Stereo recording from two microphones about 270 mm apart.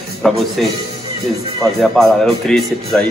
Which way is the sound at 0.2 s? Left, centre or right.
Centre.